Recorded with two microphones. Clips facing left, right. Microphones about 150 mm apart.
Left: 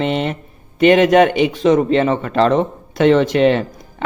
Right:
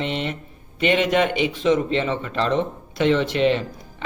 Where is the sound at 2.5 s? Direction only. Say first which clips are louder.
Left 6 dB; 50° left (ahead or behind).